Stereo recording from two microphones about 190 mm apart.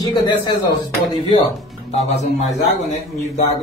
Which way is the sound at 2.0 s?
35° left (ahead or behind).